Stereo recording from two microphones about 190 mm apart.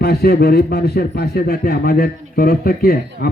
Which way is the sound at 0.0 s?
55° left (ahead or behind).